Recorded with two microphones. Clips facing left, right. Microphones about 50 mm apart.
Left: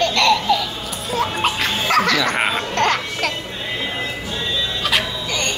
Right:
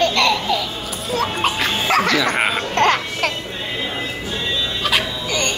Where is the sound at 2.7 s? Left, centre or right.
Right.